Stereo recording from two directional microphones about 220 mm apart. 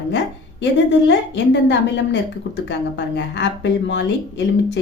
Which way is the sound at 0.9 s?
55° left (ahead or behind).